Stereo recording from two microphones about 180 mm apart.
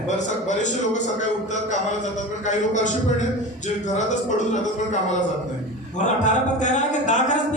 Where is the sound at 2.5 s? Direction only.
40° left (ahead or behind).